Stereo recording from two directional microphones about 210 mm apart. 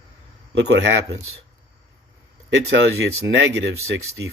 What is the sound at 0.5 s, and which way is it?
Speech, 55° right (ahead or behind).